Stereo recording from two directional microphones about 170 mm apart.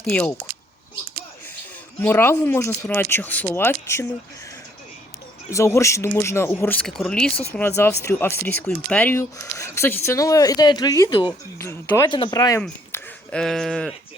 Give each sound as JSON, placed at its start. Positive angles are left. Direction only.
{"t": 0.0, "sound": "speech", "side_deg": 5}
{"t": 2.0, "sound": "speech", "side_deg": 15}
{"t": 5.5, "sound": "speech", "side_deg": 15}
{"t": 11.5, "sound": "speech", "side_deg": 15}
{"t": 12.6, "sound": "speech", "side_deg": 5}